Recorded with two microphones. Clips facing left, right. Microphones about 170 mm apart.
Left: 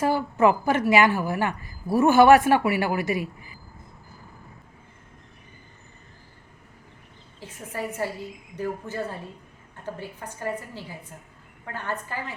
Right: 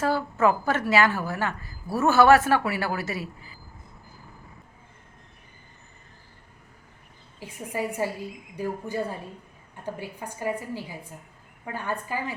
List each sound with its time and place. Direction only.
0.0 s a woman's voice: 15° left (ahead or behind)
7.3 s a woman's voice: 10° right (ahead or behind)